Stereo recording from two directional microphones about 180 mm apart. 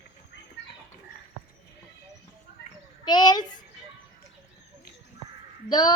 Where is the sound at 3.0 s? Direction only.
25° left (ahead or behind).